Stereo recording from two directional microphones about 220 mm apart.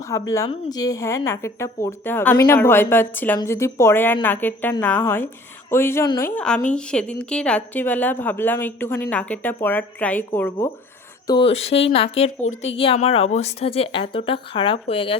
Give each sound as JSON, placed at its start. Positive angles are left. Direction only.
{"t": 0.1, "sound": "a woman's voice", "side_deg": 15}
{"t": 11.3, "sound": "a woman's voice", "side_deg": 25}